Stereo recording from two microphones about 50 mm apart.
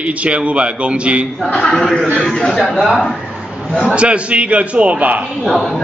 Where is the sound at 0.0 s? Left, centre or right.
Right.